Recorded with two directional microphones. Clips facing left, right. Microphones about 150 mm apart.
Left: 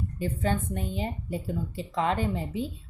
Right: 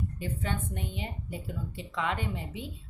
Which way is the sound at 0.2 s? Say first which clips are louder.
Left 8 dB; 40° left (ahead or behind).